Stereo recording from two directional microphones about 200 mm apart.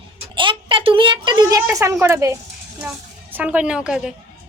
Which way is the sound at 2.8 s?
5° right (ahead or behind).